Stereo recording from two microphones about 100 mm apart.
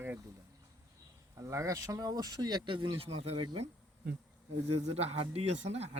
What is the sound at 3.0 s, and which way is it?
Speech, 80° right.